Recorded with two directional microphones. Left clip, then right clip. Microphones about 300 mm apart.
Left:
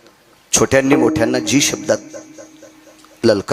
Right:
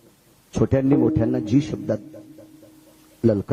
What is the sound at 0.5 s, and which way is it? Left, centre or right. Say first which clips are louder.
A man's voice: left 7 dB; centre.